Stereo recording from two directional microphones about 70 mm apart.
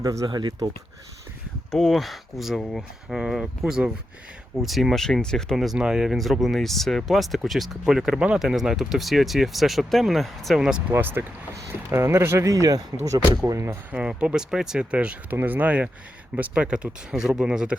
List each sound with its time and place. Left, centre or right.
0.0 s speech: right
0.3 s speech: right
1.7 s speech: centre
3.2 s speech: centre
4.9 s speech: centre
5.5 s speech: centre
10.9 s speech: right
13.9 s speech: centre